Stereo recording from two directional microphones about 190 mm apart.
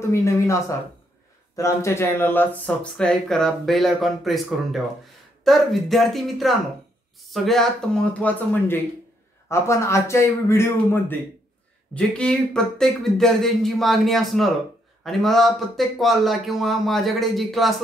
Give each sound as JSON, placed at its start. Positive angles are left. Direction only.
{"t": 0.1, "sound": "a man's voice", "side_deg": 15}